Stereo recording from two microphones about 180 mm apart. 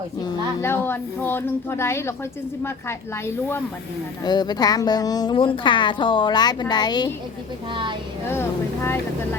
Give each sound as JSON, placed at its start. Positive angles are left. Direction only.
{"t": 0.2, "sound": "a woman's voice", "side_deg": 20}
{"t": 7.7, "sound": "speech", "side_deg": -25}
{"t": 8.3, "sound": "speech", "side_deg": 15}